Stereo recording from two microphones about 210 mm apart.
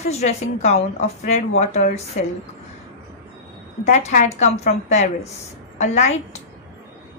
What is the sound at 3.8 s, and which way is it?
A woman's voice, 35° left (ahead or behind).